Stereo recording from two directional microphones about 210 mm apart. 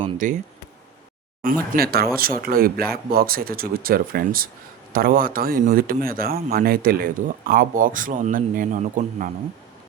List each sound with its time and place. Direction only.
0.2 s speech: 35° right (ahead or behind)
1.7 s a man's voice: 45° right (ahead or behind)